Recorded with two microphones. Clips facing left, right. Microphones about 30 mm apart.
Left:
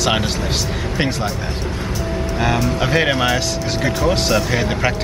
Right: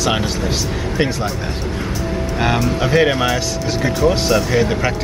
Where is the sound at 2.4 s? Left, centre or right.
Centre.